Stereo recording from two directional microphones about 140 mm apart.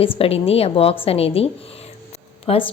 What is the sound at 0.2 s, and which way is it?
A woman's voice, 45° left (ahead or behind).